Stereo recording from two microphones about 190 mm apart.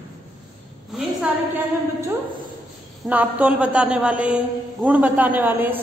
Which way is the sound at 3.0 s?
5° right (ahead or behind).